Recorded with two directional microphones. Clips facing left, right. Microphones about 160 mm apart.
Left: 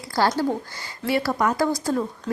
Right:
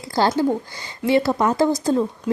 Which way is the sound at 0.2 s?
25° right (ahead or behind).